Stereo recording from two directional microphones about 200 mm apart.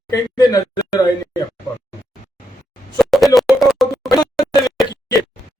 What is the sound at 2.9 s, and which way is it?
Plop, centre (ahead or behind).